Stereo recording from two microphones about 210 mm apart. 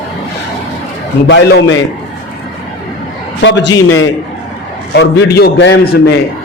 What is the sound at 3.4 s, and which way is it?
Speech, 55° left (ahead or behind).